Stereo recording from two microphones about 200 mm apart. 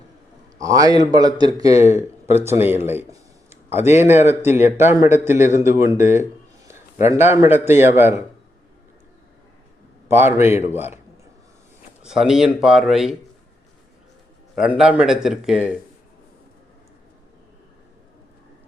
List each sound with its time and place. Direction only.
0.6 s a man's voice: 15° right (ahead or behind)
4.0 s speech: 35° left (ahead or behind)
4.3 s a man's voice: 10° right (ahead or behind)
10.1 s a man's voice: 10° right (ahead or behind)
12.0 s a man's voice: 5° right (ahead or behind)
14.5 s a man's voice: 5° right (ahead or behind)